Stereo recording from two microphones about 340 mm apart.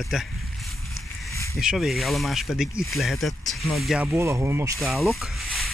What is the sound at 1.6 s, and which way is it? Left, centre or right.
Speech, centre.